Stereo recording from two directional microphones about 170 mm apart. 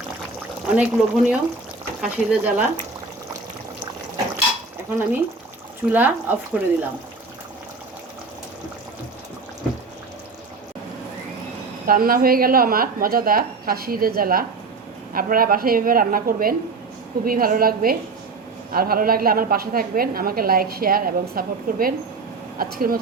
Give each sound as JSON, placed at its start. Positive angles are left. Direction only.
{"t": 0.8, "sound": "speech", "side_deg": -5}
{"t": 4.9, "sound": "speech", "side_deg": -10}
{"t": 11.9, "sound": "a woman's voice", "side_deg": -60}